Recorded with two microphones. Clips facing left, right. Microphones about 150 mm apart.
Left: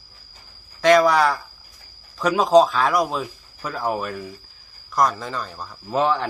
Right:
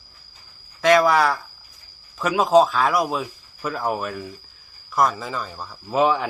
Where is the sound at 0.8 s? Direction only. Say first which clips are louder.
Left 1 dB; centre (ahead or behind).